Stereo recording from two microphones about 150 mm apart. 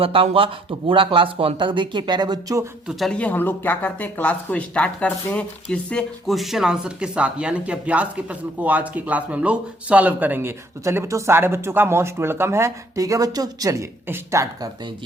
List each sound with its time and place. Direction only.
0.0 s speech: 35° right (ahead or behind)
2.8 s speech: 5° left (ahead or behind); by 14.7 s 20° right (ahead or behind)